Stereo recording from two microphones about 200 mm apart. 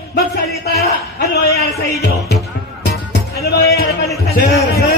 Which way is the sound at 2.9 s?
50° left (ahead or behind).